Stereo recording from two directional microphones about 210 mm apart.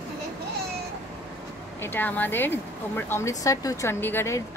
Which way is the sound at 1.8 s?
10° left (ahead or behind).